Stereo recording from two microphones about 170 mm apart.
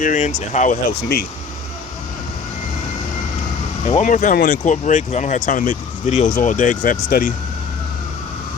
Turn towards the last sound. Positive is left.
turn(degrees=55)  # may be behind; listen again after turning